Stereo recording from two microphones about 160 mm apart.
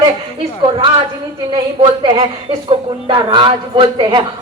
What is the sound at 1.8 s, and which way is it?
Speech, 35° right (ahead or behind).